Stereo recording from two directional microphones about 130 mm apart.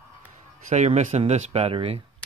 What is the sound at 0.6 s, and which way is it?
Speech, 60° right (ahead or behind).